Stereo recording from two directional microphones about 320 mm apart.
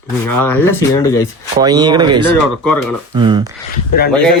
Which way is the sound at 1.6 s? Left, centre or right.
Centre.